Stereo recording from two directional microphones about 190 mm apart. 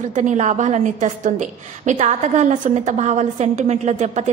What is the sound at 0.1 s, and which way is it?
A woman's voice, 40° right (ahead or behind).